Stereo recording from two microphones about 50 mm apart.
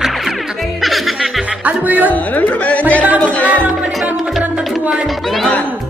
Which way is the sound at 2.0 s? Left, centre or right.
Left.